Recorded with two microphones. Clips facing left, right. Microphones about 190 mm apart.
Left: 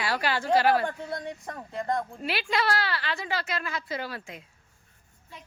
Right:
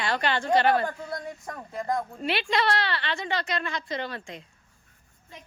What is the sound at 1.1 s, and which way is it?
Speech, 25° left (ahead or behind).